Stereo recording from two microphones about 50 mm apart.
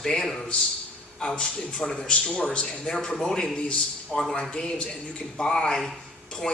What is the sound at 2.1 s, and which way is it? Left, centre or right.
Speech, left.